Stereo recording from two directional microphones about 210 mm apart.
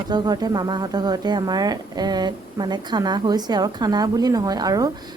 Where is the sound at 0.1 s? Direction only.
20° right (ahead or behind).